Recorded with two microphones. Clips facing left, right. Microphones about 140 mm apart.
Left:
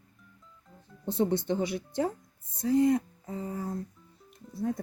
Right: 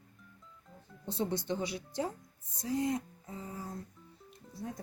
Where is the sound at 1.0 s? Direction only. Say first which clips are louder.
Left 7 dB; 55° left (ahead or behind).